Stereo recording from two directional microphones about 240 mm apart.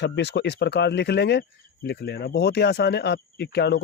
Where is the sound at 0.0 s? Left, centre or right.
Left.